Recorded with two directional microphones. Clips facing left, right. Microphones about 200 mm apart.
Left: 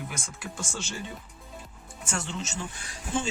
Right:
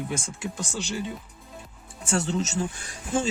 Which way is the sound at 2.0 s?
35° right (ahead or behind).